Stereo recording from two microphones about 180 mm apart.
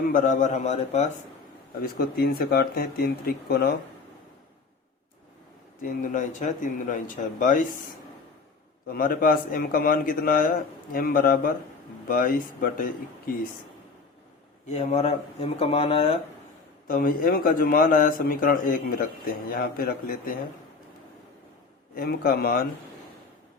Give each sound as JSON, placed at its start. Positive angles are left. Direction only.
{"t": 0.1, "sound": "speech", "side_deg": 45}
{"t": 1.8, "sound": "speech", "side_deg": 60}
{"t": 5.8, "sound": "a man's voice", "side_deg": 50}
{"t": 8.9, "sound": "a man's voice", "side_deg": 50}
{"t": 14.7, "sound": "speech", "side_deg": 40}
{"t": 16.8, "sound": "a man's voice", "side_deg": 50}
{"t": 21.9, "sound": "speech", "side_deg": 55}